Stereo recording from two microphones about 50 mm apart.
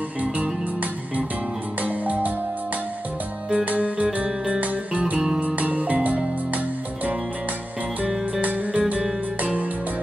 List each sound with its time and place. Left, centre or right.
1.8 s music: right
3.4 s music: right
8.4 s music: right